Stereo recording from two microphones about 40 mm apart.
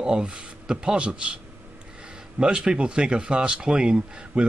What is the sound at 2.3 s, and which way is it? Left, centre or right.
Speech, right.